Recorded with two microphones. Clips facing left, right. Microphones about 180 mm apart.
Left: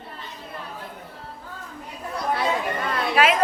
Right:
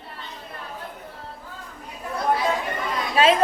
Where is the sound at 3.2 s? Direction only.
25° right (ahead or behind).